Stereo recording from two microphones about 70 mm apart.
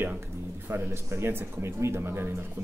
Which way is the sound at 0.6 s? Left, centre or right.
Right.